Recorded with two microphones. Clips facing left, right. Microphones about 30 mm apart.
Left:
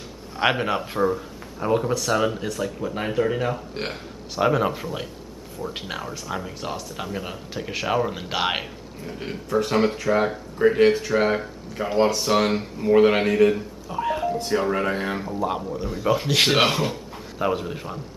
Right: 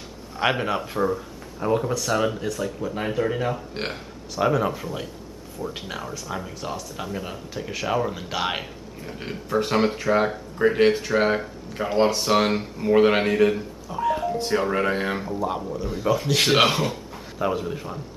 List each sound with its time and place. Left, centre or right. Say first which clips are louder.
0.4 s speech: left 1 dB; centre
4.4 s speech: left 1 dB; centre
9.0 s speech: left 2 dB; centre
13.8 s music: even; centre
14.3 s speech: even; centre
15.3 s speech: left 1 dB; centre
16.5 s speech: right 1 dB; centre
16.8 s speech: even; centre